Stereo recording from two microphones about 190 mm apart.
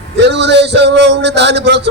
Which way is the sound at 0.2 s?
65° right (ahead or behind).